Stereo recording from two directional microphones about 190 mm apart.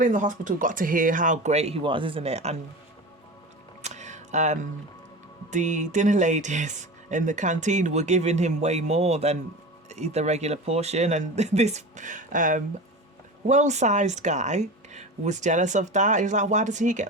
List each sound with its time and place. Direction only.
0.0 s speech: 45° right (ahead or behind)
3.8 s music: 40° right (ahead or behind)
5.5 s speech: 40° right (ahead or behind)